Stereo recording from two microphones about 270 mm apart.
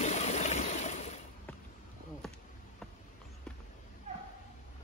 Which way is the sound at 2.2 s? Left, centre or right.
Centre.